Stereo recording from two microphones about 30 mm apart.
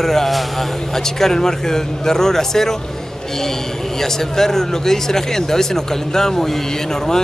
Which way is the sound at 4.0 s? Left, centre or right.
Centre.